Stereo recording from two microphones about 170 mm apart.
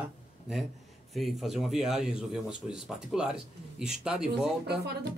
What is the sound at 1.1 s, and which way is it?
Speech, centre (ahead or behind).